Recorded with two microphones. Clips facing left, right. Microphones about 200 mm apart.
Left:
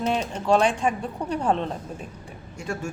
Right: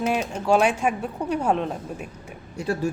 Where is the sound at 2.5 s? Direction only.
35° right (ahead or behind).